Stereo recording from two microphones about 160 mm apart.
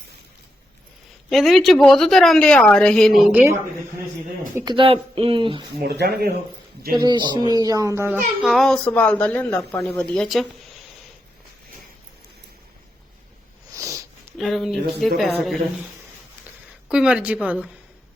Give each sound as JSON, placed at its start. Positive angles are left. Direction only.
{"t": 1.3, "sound": "a woman's voice", "side_deg": 0}
{"t": 4.5, "sound": "speech", "side_deg": -25}
{"t": 5.8, "sound": "speech", "side_deg": -90}
{"t": 7.0, "sound": "a child's voice", "side_deg": -25}
{"t": 13.7, "sound": "sniff", "side_deg": -20}
{"t": 14.3, "sound": "a woman's voice", "side_deg": 0}
{"t": 16.9, "sound": "a child's voice", "side_deg": -5}